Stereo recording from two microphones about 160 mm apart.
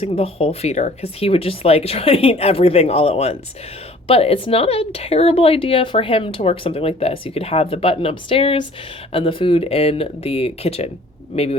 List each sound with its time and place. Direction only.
0.0 s speech: 35° left (ahead or behind)